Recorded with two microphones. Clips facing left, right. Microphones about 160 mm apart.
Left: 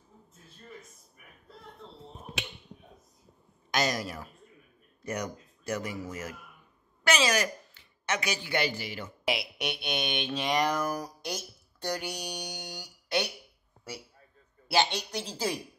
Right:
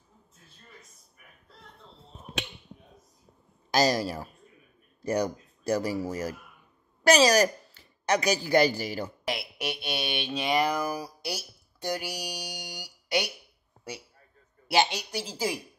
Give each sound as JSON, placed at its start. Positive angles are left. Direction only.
{"t": 3.7, "sound": "speech", "side_deg": -30}
{"t": 9.2, "sound": "speech", "side_deg": 0}
{"t": 14.7, "sound": "speech", "side_deg": -10}